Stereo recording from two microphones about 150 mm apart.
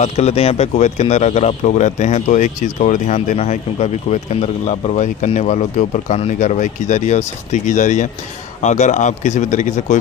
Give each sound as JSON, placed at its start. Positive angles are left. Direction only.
{"t": 0.0, "sound": "speech", "side_deg": 45}